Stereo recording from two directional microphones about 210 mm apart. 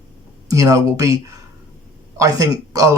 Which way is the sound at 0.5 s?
15° right (ahead or behind).